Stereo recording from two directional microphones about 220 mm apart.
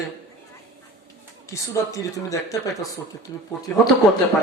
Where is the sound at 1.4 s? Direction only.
15° left (ahead or behind).